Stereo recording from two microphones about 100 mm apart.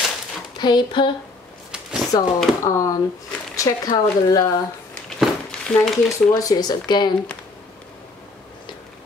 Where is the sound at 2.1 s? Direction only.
35° left (ahead or behind).